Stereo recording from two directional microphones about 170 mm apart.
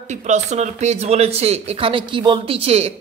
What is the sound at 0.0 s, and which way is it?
Speech, 40° right (ahead or behind).